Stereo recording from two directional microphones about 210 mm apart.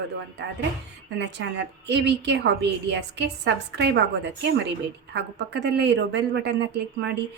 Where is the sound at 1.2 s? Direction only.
55° right (ahead or behind).